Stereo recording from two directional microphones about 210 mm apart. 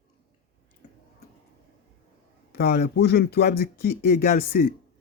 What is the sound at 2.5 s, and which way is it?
Speech, 45° left (ahead or behind).